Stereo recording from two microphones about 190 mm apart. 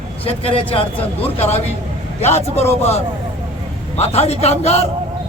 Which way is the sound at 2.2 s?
35° left (ahead or behind).